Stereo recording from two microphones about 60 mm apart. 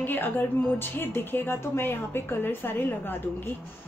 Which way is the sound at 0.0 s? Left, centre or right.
Left.